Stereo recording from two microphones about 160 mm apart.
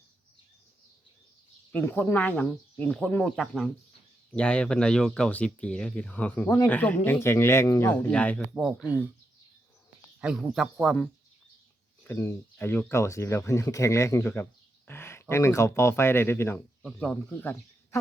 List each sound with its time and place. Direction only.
1.7 s speech: 10° left (ahead or behind)
8.5 s speech: 5° right (ahead or behind)
10.2 s speech: 5° right (ahead or behind)
12.0 s speech: 15° left (ahead or behind)